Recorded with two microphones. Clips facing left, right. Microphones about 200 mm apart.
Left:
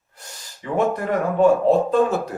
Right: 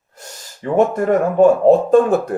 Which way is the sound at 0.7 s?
45° right (ahead or behind).